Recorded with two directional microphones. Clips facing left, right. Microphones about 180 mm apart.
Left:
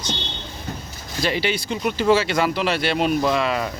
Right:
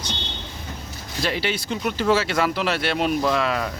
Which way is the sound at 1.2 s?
Centre (ahead or behind).